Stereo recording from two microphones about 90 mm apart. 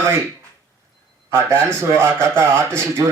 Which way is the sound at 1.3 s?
25° right (ahead or behind).